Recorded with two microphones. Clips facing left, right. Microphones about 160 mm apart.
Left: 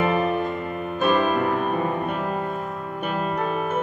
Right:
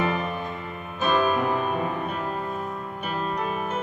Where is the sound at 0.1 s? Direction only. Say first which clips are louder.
Left 7 dB; 55° left (ahead or behind).